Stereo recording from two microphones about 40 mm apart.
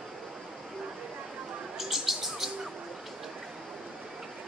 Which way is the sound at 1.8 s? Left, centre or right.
Centre.